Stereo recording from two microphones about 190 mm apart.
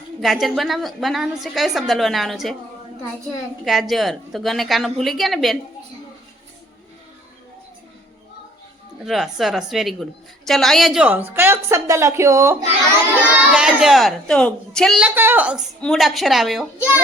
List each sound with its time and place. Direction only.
0.2 s a woman's voice: centre (ahead or behind)
3.6 s a woman's voice: centre (ahead or behind)
9.0 s a woman's voice: centre (ahead or behind)